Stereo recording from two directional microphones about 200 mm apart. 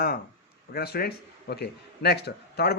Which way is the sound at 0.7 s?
50° left (ahead or behind).